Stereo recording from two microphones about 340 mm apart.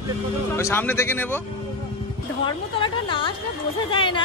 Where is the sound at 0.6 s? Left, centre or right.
Centre.